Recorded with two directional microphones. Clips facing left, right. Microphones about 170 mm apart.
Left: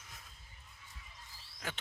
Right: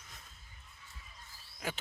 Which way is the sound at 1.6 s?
10° right (ahead or behind).